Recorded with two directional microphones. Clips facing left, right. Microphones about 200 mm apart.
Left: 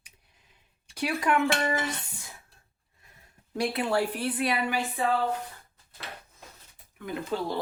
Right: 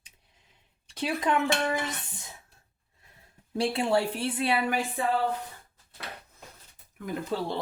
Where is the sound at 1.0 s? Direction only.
20° right (ahead or behind).